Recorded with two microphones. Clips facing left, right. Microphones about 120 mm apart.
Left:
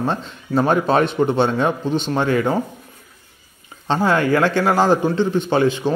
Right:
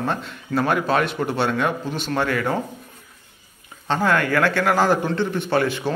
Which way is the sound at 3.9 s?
20° left (ahead or behind).